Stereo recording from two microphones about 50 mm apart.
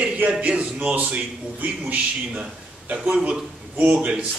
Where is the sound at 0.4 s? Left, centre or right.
Right.